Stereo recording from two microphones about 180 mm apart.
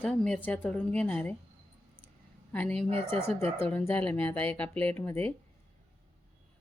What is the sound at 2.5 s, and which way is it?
Speech, 5° left (ahead or behind).